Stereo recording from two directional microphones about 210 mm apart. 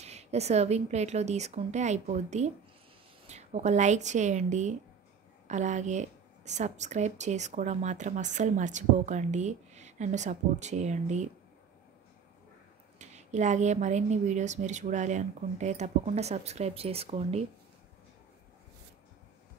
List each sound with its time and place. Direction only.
0.0 s speech: 30° right (ahead or behind)
13.0 s speech: 35° right (ahead or behind)